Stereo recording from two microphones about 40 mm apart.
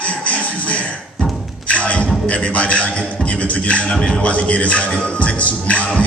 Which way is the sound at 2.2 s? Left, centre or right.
Left.